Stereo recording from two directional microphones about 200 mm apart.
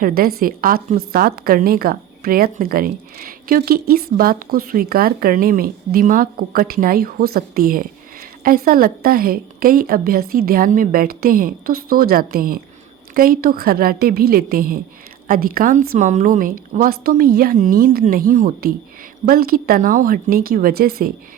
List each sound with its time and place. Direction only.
0.0 s a woman's voice: 50° right (ahead or behind)